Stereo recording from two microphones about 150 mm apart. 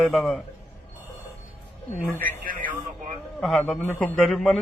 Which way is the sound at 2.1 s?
70° right (ahead or behind).